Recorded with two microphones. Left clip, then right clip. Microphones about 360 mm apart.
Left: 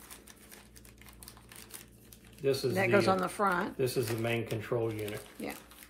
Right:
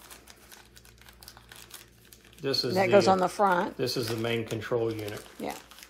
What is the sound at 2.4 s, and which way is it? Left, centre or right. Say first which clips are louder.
Speech: right 3 dB; centre.